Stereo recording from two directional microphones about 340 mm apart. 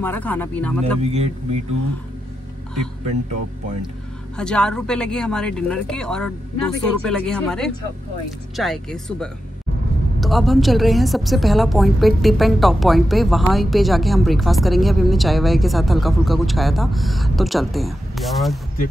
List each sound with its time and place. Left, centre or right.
0.0 s a woman's voice: centre
1.1 s speech: centre
4.4 s a woman's voice: centre